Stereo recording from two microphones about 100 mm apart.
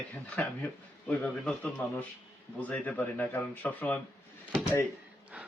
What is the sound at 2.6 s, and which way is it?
Speech, 15° left (ahead or behind).